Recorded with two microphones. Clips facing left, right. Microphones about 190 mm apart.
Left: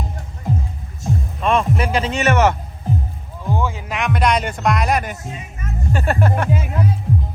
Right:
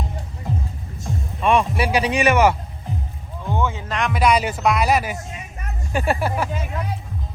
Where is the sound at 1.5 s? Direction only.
10° right (ahead or behind).